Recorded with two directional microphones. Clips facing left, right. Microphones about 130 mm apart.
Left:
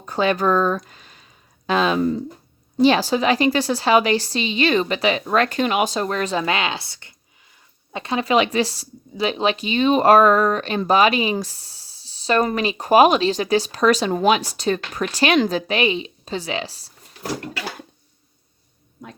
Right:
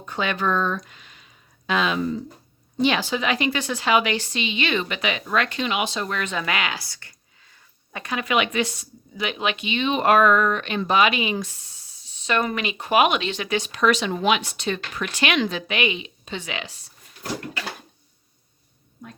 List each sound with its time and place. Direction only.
0.0 s speech: 35° left (ahead or behind)